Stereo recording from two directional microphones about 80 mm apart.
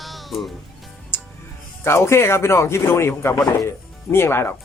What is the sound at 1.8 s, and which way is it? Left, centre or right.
Speech, left.